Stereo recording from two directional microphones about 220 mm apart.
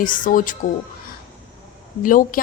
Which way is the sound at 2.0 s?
40° left (ahead or behind).